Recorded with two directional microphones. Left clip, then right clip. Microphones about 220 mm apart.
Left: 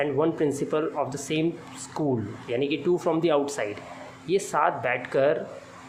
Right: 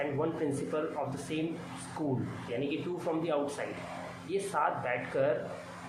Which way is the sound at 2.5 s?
50° left (ahead or behind).